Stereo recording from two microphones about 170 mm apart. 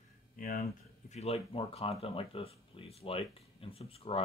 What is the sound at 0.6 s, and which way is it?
Speech, 40° left (ahead or behind).